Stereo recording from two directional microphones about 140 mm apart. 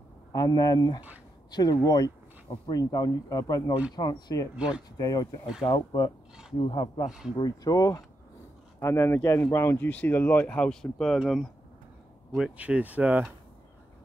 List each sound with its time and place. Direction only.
0.3 s speech: 25° left (ahead or behind)
4.6 s speech: 5° right (ahead or behind)
4.9 s speech: 25° left (ahead or behind)
6.6 s speech: 40° left (ahead or behind)
7.1 s speech: 5° right (ahead or behind)
7.3 s speech: 25° left (ahead or behind); by 13.3 s 10° right (ahead or behind)